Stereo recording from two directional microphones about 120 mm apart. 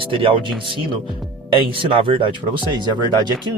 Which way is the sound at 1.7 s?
45° right (ahead or behind).